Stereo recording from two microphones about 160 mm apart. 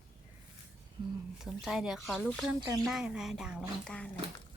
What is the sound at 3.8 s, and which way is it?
Speech, 5° left (ahead or behind).